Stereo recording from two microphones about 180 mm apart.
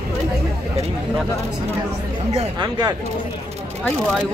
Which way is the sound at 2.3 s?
25° right (ahead or behind).